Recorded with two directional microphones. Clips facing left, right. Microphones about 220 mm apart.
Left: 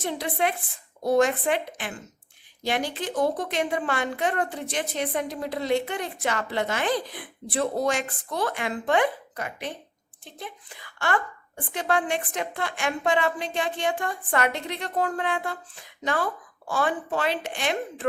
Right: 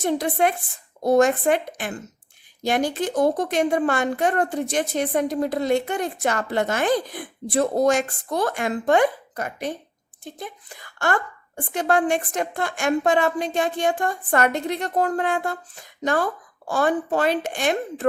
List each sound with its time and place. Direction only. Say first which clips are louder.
0.0 s a woman's voice: right 6 dB; 45° right (ahead or behind)